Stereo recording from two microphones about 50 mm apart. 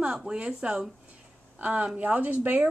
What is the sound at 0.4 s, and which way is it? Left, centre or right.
Speech, right.